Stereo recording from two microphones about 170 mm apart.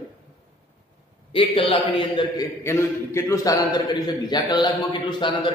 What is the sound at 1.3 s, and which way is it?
A man's voice, 30° left (ahead or behind).